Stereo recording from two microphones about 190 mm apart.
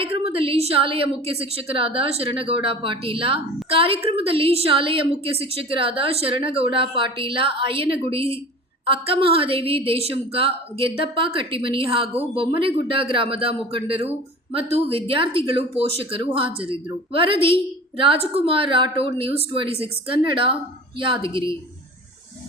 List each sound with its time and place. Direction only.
0.0 s a woman's voice: 30° right (ahead or behind)